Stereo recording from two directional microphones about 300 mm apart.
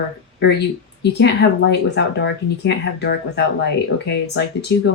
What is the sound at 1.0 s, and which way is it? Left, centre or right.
Speech, left.